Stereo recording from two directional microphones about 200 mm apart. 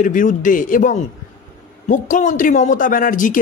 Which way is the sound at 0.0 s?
40° left (ahead or behind).